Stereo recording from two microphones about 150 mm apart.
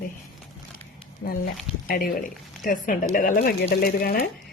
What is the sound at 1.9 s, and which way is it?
Speech, 70° left (ahead or behind).